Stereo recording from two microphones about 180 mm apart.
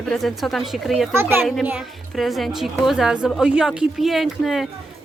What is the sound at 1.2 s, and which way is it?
A woman's voice, 10° right (ahead or behind).